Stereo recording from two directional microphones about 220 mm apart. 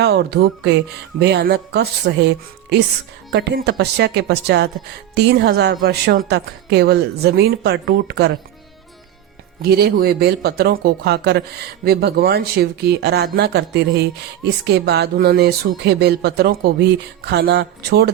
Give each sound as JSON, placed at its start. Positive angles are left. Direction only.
{"t": 0.0, "sound": "speech", "side_deg": -50}
{"t": 9.6, "sound": "speech", "side_deg": -45}